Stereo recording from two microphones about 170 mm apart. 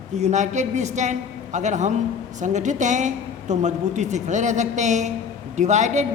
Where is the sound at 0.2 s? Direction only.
45° right (ahead or behind).